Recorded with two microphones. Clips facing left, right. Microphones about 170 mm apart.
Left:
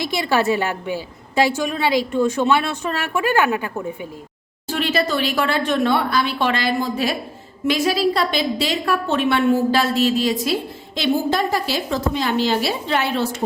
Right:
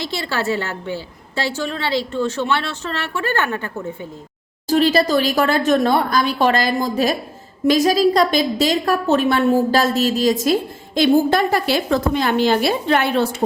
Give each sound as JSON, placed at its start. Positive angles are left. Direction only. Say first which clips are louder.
{"t": 0.0, "sound": "a woman's voice", "louder": "left 4 dB", "side_deg": 15}
{"t": 4.7, "sound": "a woman's voice", "louder": "right 6 dB", "side_deg": -35}